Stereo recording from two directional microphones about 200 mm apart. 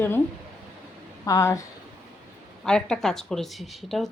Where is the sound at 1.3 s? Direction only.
15° left (ahead or behind).